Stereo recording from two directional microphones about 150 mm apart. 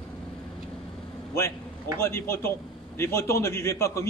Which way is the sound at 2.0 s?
20° left (ahead or behind).